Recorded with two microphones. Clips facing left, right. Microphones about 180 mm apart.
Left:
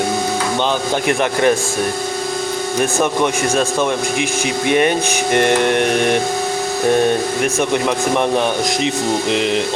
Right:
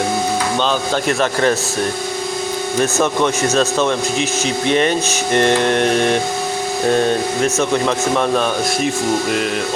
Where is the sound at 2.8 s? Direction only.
15° left (ahead or behind).